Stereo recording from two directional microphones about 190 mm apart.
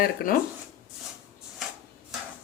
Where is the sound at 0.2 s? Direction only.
50° left (ahead or behind).